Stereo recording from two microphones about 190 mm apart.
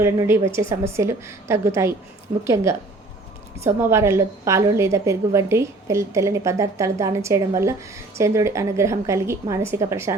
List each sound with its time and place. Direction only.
0.0 s a woman's voice: 15° right (ahead or behind)